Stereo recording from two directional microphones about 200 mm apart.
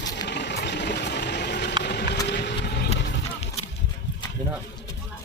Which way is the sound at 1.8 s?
60° left (ahead or behind).